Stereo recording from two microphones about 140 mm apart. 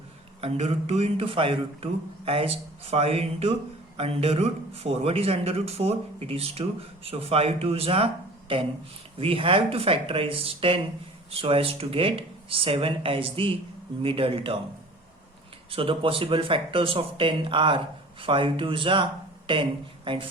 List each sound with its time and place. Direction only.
0.4 s a man's voice: 45° right (ahead or behind)
15.7 s speech: 40° right (ahead or behind)